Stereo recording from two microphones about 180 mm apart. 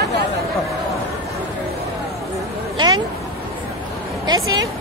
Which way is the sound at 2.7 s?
25° right (ahead or behind).